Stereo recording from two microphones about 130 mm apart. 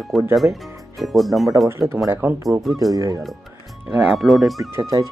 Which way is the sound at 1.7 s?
20° right (ahead or behind).